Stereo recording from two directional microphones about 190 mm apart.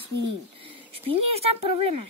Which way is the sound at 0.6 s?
30° right (ahead or behind).